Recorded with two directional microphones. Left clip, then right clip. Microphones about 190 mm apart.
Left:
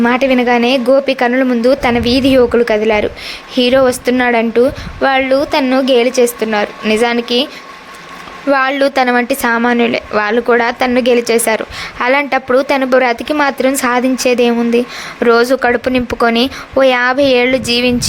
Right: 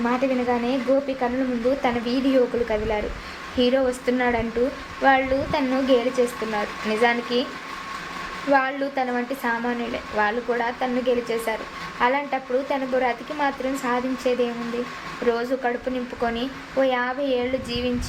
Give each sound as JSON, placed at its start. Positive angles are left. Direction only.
{"t": 0.0, "sound": "a woman's voice", "side_deg": 50}
{"t": 8.5, "sound": "speech", "side_deg": 50}